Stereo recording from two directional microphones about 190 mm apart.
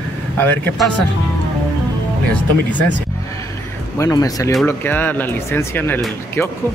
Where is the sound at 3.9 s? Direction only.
15° left (ahead or behind).